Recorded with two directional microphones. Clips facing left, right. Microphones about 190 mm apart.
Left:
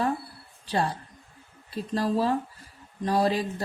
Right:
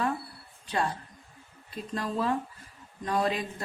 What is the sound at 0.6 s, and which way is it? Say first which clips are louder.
Speech: left 3 dB; 35° left (ahead or behind).